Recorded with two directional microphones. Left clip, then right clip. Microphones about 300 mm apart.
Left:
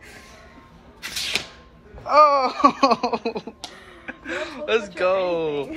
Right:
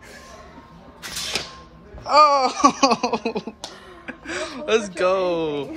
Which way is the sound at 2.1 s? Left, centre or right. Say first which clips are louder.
Even; centre.